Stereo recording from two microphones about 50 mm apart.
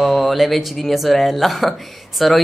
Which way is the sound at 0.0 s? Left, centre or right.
Centre.